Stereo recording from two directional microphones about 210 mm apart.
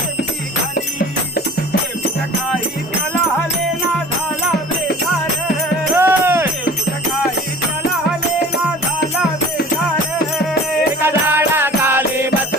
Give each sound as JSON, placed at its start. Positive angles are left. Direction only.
{"t": 6.0, "sound": "music", "side_deg": -10}
{"t": 11.0, "sound": "music", "side_deg": -10}